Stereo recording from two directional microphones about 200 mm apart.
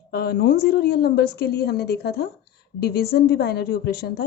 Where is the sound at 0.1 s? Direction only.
50° left (ahead or behind).